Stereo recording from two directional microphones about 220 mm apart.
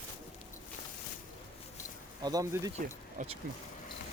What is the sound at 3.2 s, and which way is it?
Speech, 35° right (ahead or behind).